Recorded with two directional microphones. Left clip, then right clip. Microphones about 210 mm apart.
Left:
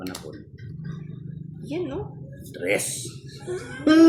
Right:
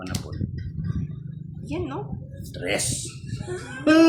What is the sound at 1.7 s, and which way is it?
Speech, 35° right (ahead or behind).